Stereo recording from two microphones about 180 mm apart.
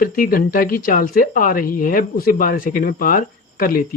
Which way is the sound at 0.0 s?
50° left (ahead or behind).